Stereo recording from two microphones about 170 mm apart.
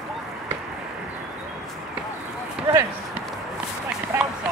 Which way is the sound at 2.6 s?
5° right (ahead or behind).